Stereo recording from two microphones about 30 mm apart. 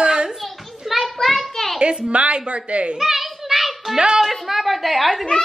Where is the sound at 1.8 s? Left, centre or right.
Right.